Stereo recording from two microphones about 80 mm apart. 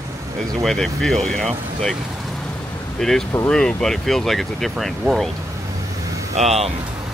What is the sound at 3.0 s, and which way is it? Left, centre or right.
Speech, centre.